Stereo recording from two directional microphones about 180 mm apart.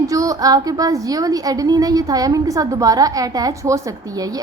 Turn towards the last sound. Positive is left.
turn(degrees=-20)  # may be behind; listen again after turning